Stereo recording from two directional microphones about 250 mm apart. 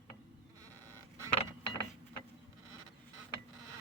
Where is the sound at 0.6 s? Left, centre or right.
Centre.